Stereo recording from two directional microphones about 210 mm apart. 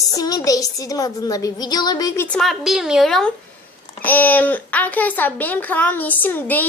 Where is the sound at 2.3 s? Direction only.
Centre (ahead or behind).